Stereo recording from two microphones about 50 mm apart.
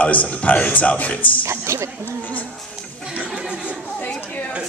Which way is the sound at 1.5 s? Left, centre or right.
Right.